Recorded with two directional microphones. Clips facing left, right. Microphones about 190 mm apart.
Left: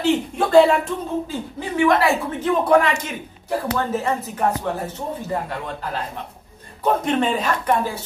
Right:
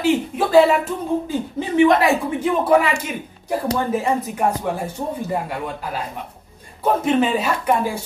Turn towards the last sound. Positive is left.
turn(degrees=-10)  # may be behind; listen again after turning